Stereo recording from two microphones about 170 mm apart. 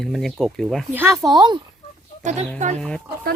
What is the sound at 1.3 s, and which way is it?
Speech, 25° right (ahead or behind).